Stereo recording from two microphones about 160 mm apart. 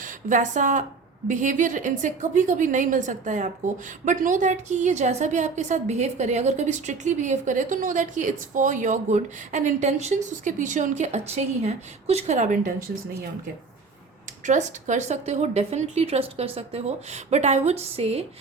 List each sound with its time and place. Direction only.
0.0 s a woman's voice: 55° right (ahead or behind)
14.4 s a woman's voice: 50° right (ahead or behind)